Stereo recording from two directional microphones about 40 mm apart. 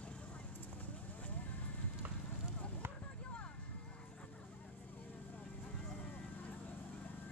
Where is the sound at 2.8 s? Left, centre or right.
Right.